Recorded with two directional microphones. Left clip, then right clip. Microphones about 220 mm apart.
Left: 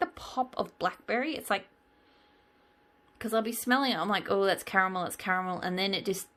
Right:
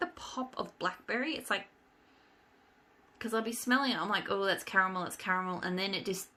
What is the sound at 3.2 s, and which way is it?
Speech, 35° left (ahead or behind).